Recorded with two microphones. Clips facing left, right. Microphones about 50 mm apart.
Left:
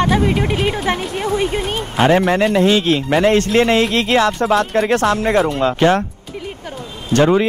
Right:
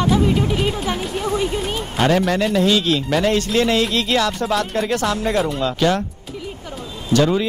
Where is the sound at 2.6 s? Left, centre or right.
Left.